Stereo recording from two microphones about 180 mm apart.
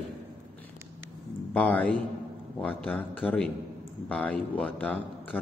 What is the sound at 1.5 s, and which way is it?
A man's voice, 10° left (ahead or behind).